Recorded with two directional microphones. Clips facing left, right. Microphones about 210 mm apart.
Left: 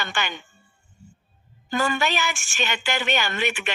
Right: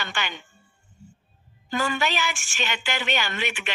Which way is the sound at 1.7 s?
45° left (ahead or behind).